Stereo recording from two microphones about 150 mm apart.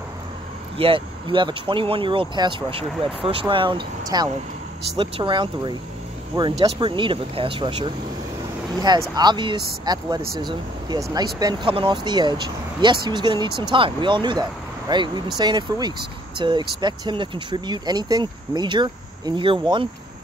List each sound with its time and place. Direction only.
0.7 s speech: 35° right (ahead or behind)